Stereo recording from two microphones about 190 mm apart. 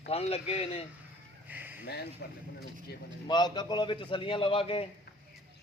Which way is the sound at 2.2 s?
65° left (ahead or behind).